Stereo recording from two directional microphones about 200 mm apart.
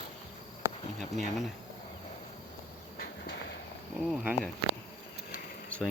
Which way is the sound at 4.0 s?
5° right (ahead or behind).